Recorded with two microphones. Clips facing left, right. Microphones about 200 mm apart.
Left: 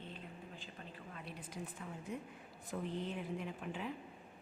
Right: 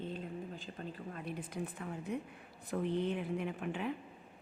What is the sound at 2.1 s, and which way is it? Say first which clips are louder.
A woman's voice: right 5 dB; 65° right (ahead or behind).